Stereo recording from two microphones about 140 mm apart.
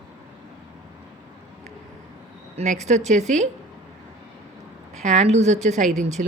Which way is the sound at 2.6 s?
55° right (ahead or behind).